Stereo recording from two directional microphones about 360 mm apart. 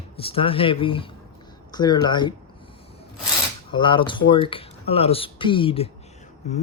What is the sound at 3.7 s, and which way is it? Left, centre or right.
Speech, centre.